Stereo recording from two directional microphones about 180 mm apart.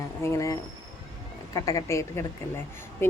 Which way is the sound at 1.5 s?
20° left (ahead or behind).